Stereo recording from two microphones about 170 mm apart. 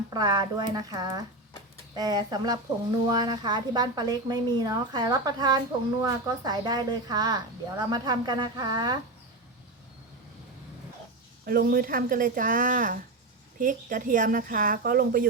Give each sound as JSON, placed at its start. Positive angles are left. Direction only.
{"t": 0.1, "sound": "a woman's voice", "side_deg": -25}
{"t": 11.4, "sound": "speech", "side_deg": -60}